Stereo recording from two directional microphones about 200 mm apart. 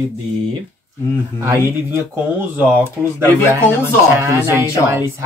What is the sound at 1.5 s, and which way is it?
Speech, 10° right (ahead or behind).